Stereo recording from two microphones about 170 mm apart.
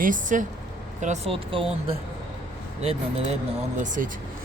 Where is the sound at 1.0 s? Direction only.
40° right (ahead or behind).